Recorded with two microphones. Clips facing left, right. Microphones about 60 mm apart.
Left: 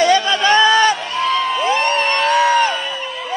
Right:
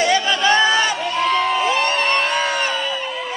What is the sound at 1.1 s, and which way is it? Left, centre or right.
Crowd, right.